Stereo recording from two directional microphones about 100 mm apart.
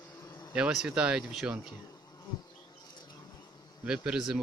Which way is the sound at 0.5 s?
10° right (ahead or behind).